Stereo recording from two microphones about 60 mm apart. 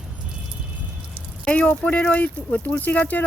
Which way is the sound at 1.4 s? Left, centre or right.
Left.